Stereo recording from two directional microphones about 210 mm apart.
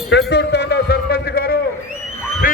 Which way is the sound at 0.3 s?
55° left (ahead or behind).